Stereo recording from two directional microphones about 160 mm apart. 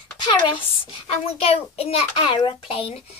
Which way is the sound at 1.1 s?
40° left (ahead or behind).